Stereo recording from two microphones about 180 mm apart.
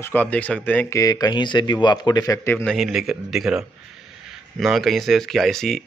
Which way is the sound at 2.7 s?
Centre (ahead or behind).